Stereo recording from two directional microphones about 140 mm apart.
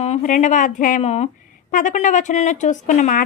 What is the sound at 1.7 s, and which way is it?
A woman's voice, 65° left (ahead or behind).